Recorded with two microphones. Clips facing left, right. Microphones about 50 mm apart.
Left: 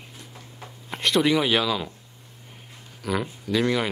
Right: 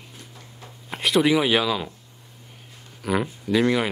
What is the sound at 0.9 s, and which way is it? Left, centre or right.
Speech, centre.